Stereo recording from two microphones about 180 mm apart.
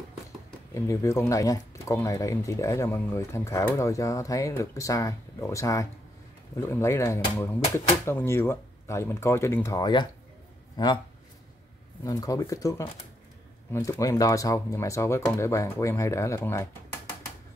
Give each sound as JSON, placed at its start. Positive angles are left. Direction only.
{"t": 0.7, "sound": "speech", "side_deg": 15}
{"t": 12.0, "sound": "speech", "side_deg": 20}